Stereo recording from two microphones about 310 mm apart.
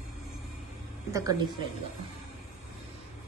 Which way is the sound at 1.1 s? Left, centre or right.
Centre.